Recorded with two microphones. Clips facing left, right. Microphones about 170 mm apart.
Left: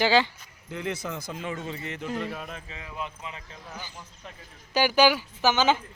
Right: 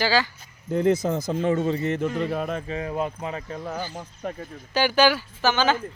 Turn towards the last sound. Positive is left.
turn(degrees=15)  # may be behind; listen again after turning